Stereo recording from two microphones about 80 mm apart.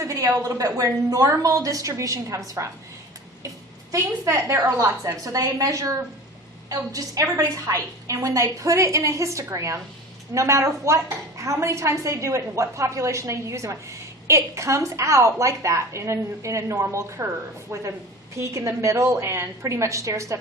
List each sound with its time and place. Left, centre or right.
0.0 s a sound: right
0.3 s a woman's voice: right
3.9 s a woman's voice: right